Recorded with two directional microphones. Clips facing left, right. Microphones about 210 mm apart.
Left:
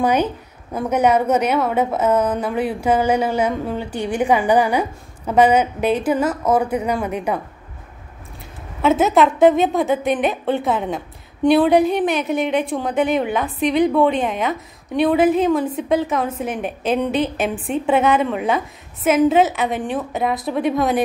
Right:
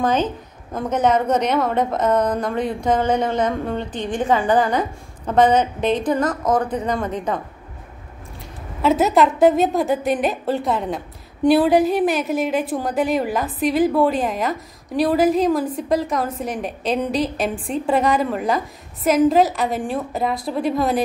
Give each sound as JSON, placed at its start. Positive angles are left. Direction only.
{"t": 0.0, "sound": "a woman's voice", "side_deg": 10}
{"t": 8.8, "sound": "a woman's voice", "side_deg": 0}